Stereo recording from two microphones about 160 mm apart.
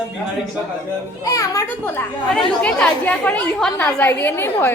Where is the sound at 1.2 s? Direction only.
20° left (ahead or behind).